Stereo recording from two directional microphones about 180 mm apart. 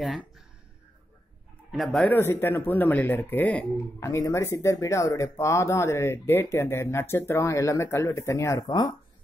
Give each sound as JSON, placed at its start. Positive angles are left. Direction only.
{"t": 0.0, "sound": "speech", "side_deg": 0}
{"t": 1.7, "sound": "speech", "side_deg": 0}